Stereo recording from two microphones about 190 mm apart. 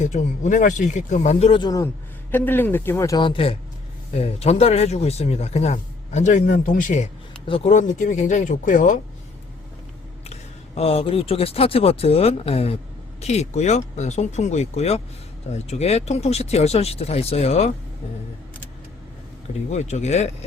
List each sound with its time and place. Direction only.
0.0 s speech: 40° left (ahead or behind)
10.8 s speech: 30° left (ahead or behind)
19.7 s speech: 35° left (ahead or behind)